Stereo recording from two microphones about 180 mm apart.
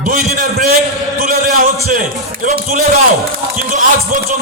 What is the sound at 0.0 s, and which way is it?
Speech, 40° right (ahead or behind).